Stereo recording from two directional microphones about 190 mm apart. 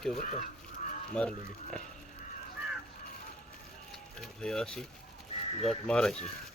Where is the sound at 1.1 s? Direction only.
5° left (ahead or behind).